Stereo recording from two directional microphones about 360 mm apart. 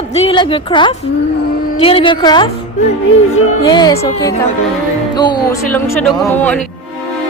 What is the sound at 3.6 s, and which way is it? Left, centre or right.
A woman's voice, centre.